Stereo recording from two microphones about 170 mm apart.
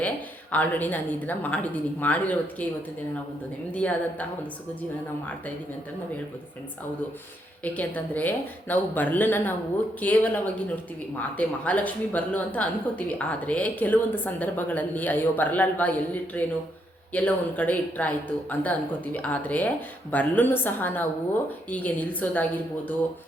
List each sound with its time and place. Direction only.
0.5 s speech: 10° left (ahead or behind)
3.8 s speech: 10° left (ahead or behind)
7.6 s speech: 10° left (ahead or behind)